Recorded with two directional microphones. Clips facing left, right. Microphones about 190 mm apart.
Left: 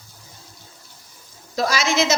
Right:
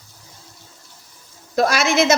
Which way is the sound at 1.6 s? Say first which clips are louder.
Right 4 dB; 55° right (ahead or behind).